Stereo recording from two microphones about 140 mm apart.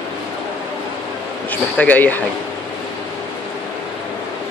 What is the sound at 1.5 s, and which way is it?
Speech, 10° left (ahead or behind).